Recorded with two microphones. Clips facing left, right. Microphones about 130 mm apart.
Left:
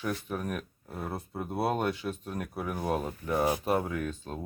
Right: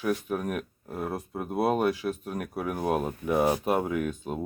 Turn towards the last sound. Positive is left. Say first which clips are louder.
# right 5 dB
turn(degrees=-10)  # may be behind; listen again after turning